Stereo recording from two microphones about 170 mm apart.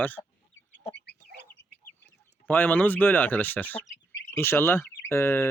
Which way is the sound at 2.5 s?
10° left (ahead or behind).